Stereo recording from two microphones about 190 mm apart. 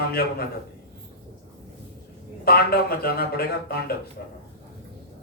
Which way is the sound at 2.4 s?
55° left (ahead or behind).